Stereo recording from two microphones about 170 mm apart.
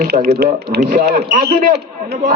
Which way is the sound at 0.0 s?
70° right (ahead or behind).